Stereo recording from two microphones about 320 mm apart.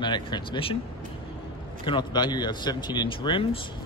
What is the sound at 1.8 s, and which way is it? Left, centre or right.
Speech, centre.